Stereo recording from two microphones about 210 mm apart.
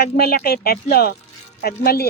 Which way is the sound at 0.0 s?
45° left (ahead or behind).